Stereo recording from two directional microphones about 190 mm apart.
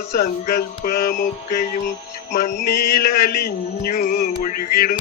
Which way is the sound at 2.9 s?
55° left (ahead or behind).